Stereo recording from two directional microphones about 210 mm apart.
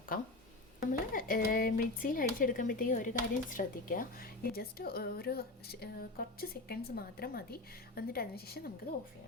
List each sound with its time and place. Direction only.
0.8 s speech: 45° left (ahead or behind)